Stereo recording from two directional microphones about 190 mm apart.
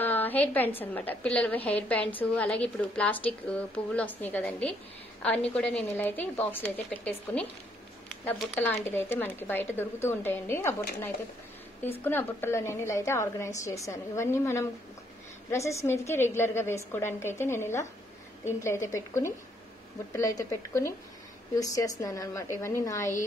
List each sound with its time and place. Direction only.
0.0 s a woman's voice: 10° left (ahead or behind)
8.3 s speech: 10° left (ahead or behind)